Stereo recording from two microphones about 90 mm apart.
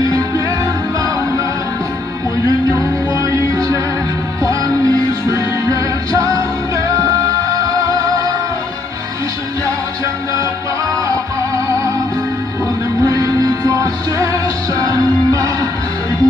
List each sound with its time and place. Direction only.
3.1 s music: 40° right (ahead or behind)
13.0 s music: 45° right (ahead or behind)